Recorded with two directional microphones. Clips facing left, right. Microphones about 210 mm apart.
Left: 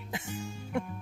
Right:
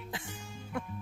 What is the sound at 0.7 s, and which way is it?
Music, 25° left (ahead or behind).